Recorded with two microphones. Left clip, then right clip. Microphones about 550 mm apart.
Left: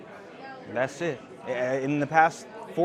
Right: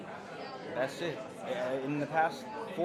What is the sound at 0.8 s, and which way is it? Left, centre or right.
A man's voice, left.